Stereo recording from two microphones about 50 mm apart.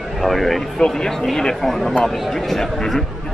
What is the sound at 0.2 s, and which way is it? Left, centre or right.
A man's voice, centre.